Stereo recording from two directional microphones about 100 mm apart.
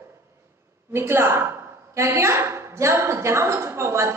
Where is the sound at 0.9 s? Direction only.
25° right (ahead or behind).